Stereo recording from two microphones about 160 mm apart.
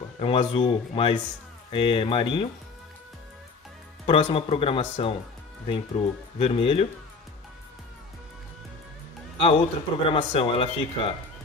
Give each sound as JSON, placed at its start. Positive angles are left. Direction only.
{"t": 0.2, "sound": "speech", "side_deg": 35}
{"t": 4.0, "sound": "speech", "side_deg": 35}
{"t": 6.3, "sound": "speech", "side_deg": 35}
{"t": 9.4, "sound": "speech", "side_deg": 35}